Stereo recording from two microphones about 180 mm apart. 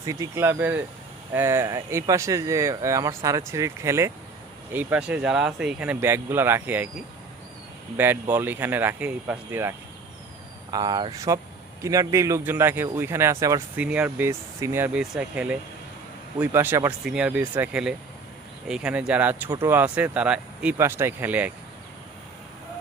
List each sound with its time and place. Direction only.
0.0 s speech: 20° right (ahead or behind)
7.9 s speech: 10° right (ahead or behind)